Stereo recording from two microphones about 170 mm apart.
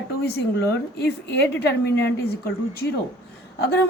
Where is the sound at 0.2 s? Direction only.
70° left (ahead or behind).